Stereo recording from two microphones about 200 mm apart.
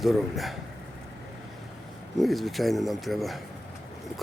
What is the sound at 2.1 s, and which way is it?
Speech, centre (ahead or behind).